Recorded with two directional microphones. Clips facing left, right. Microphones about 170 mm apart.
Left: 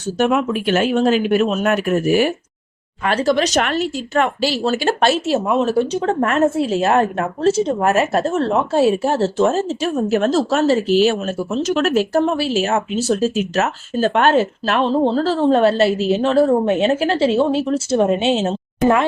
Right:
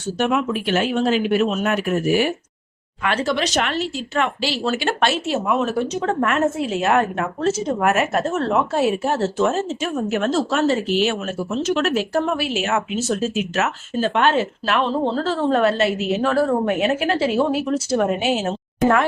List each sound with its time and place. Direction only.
0.2 s a woman's voice: 45° left (ahead or behind); by 19.0 s 20° left (ahead or behind)